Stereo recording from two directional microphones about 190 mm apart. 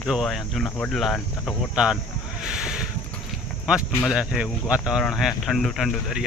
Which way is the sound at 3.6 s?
5° right (ahead or behind).